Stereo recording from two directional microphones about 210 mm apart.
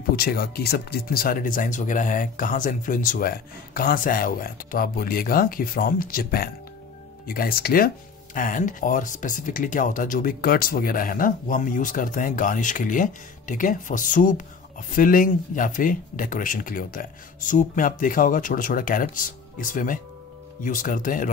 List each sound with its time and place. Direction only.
0.1 s speech: 45° left (ahead or behind)